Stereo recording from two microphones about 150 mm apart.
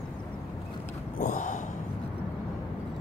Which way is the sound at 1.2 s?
60° left (ahead or behind).